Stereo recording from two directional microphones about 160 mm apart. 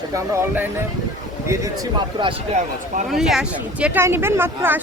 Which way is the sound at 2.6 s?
50° right (ahead or behind).